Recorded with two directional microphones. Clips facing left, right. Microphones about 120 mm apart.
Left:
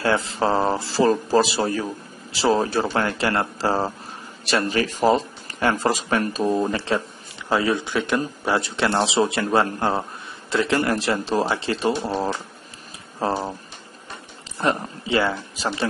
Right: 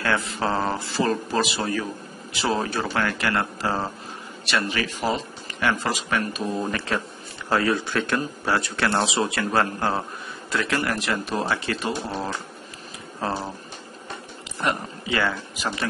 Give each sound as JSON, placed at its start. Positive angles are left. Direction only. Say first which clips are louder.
{"t": 0.0, "sound": "a man's voice", "louder": "left 4 dB", "side_deg": 25}
{"t": 6.7, "sound": "a man's voice", "louder": "left 4 dB", "side_deg": 25}
{"t": 7.4, "sound": "a man's voice", "louder": "left 1 dB", "side_deg": 15}
{"t": 14.6, "sound": "a man's voice", "louder": "left 3 dB", "side_deg": 30}